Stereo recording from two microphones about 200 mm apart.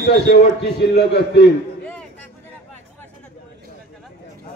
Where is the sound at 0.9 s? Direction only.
55° left (ahead or behind).